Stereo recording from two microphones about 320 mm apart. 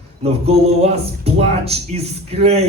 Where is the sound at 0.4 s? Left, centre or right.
Centre.